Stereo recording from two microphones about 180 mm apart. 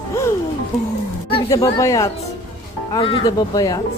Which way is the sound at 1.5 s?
15° left (ahead or behind).